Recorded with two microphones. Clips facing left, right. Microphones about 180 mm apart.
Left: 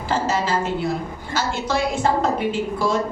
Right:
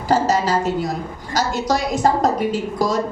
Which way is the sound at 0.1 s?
40° right (ahead or behind).